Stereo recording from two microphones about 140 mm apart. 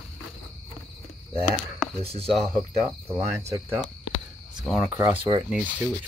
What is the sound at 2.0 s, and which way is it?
Speech, 45° right (ahead or behind).